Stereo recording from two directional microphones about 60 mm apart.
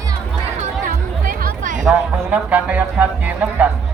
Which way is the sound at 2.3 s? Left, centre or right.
Right.